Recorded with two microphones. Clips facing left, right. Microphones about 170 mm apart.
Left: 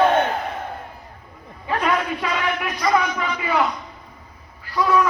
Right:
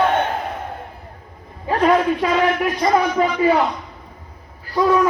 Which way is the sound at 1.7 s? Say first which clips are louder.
Right 6 dB; 35° right (ahead or behind).